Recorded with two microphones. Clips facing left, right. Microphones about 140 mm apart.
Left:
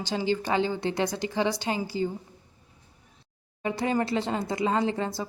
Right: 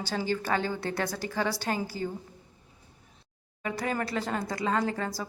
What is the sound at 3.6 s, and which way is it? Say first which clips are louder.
Speech: left 5 dB; 25° left (ahead or behind).